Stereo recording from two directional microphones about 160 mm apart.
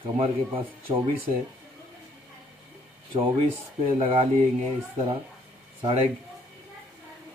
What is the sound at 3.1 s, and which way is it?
A man's voice, 35° right (ahead or behind).